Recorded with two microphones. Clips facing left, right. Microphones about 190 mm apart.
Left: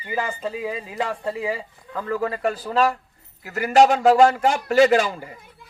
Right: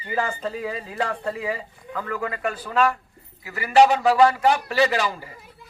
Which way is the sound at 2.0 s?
30° left (ahead or behind).